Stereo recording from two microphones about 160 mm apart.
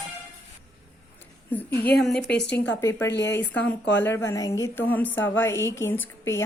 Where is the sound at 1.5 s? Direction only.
10° left (ahead or behind).